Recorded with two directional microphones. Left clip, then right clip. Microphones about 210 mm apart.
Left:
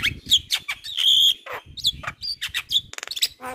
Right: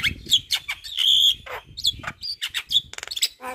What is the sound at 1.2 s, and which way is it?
Bird, 20° left (ahead or behind).